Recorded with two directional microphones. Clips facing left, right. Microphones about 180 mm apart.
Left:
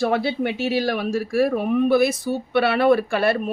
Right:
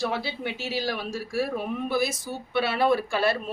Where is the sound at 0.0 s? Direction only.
55° left (ahead or behind).